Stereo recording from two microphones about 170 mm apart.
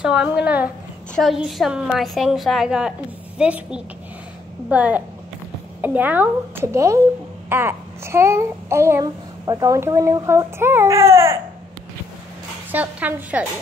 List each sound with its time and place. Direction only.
0.0 s a woman's voice: 5° right (ahead or behind)
12.7 s a woman's voice: 10° right (ahead or behind)